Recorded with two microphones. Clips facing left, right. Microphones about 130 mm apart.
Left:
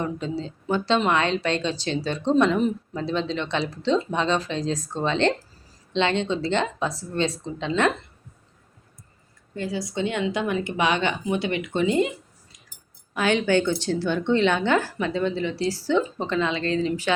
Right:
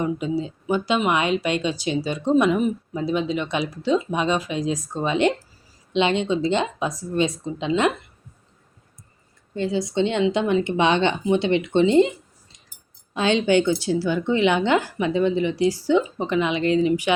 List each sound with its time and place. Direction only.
0.0 s speech: 15° right (ahead or behind)
9.6 s a woman's voice: 25° right (ahead or behind)